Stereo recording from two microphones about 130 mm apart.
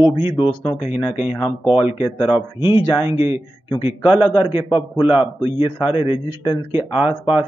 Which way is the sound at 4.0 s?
40° left (ahead or behind).